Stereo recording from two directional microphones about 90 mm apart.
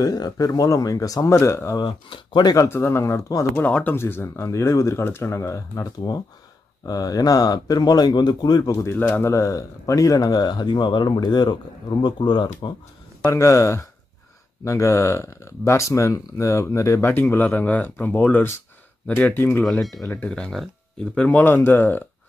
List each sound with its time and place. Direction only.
0.0 s speech: 45° left (ahead or behind)
1.8 s speech: 70° left (ahead or behind)
2.5 s speech: 30° left (ahead or behind)
3.5 s speech: 20° left (ahead or behind); by 8.7 s 50° left (ahead or behind)
8.7 s speech: 30° left (ahead or behind); by 12.7 s 55° left (ahead or behind)
13.3 s speech: 35° left (ahead or behind)
17.1 s speech: 20° left (ahead or behind)
20.2 s speech: 10° left (ahead or behind)